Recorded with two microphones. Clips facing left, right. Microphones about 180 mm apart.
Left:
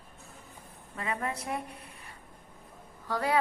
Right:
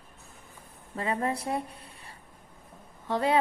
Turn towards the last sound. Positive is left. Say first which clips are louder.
# right 3 dB
turn(degrees=-25)  # may be behind; listen again after turning